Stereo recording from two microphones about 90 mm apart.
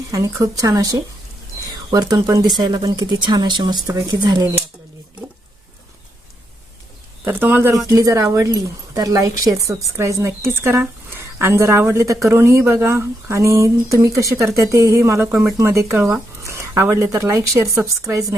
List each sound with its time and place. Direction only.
0.1 s speech: 40° right (ahead or behind)
3.8 s speech: 40° right (ahead or behind)
7.3 s speech: 20° right (ahead or behind)
7.9 s speech: 35° right (ahead or behind)